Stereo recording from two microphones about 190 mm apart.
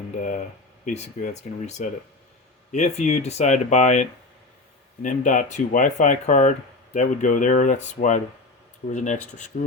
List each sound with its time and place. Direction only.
0.2 s speech: 40° left (ahead or behind)
5.0 s speech: 45° left (ahead or behind)